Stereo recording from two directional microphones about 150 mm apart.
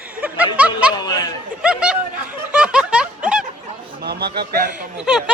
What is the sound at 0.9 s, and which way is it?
Speech, 25° left (ahead or behind).